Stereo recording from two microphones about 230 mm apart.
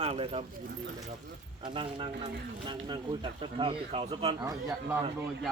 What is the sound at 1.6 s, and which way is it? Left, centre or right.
Speech, right.